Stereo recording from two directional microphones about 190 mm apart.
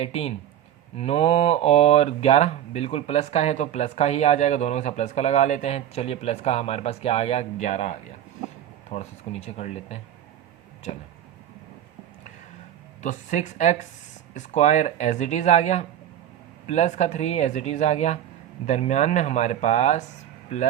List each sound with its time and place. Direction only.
0.0 s speech: 35° left (ahead or behind)
13.0 s speech: 40° left (ahead or behind)